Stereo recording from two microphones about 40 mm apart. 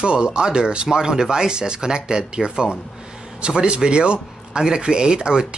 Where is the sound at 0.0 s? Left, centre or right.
Right.